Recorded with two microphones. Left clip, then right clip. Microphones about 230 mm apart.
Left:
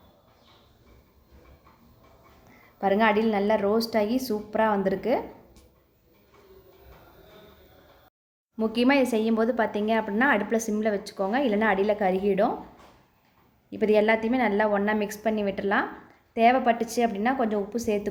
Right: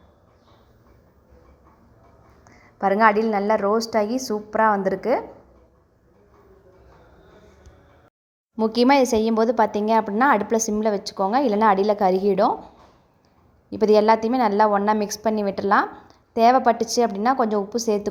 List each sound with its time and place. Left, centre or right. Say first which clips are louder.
2.9 s a woman's voice: right 5 dB; centre
4.1 s a woman's voice: right 3 dB; centre
8.5 s a woman's voice: right 6 dB; right
13.7 s a woman's voice: right 5 dB; right